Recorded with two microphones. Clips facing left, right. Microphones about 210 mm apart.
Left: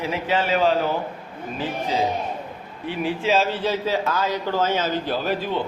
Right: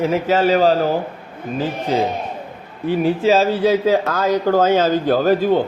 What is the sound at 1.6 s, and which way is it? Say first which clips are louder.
Speech: right 6 dB; 55° right (ahead or behind).